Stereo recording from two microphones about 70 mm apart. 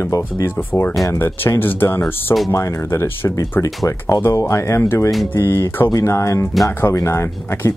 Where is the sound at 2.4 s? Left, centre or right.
Left.